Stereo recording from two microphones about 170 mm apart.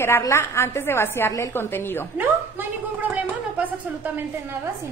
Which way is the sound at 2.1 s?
10° right (ahead or behind).